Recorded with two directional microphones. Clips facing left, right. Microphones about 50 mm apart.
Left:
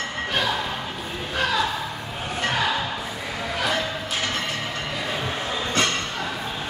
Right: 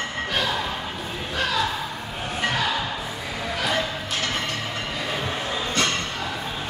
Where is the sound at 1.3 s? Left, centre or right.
Centre.